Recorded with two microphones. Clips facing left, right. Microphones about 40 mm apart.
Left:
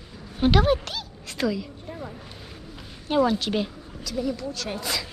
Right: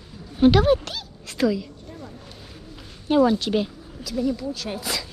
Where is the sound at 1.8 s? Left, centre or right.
Left.